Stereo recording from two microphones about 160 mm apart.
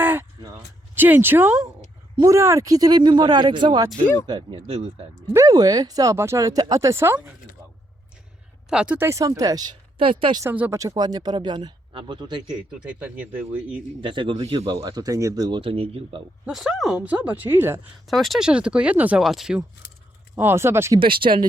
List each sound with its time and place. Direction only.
0.0 s a sound: 10° right (ahead or behind)
0.9 s speech: 10° right (ahead or behind); by 5.0 s 35° right (ahead or behind)
5.3 s speech: 20° right (ahead or behind)
8.7 s speech: 5° right (ahead or behind)
9.0 s speech: 20° right (ahead or behind)
10.4 s speech: 15° right (ahead or behind); by 12.4 s 30° right (ahead or behind)
12.5 s speech: 5° right (ahead or behind)
14.0 s speech: 30° right (ahead or behind)
14.8 s speech: 25° right (ahead or behind)
16.5 s speech: centre (ahead or behind)
18.1 s speech: centre (ahead or behind)
20.3 s speech: 15° right (ahead or behind)
21.0 s speech: 30° right (ahead or behind)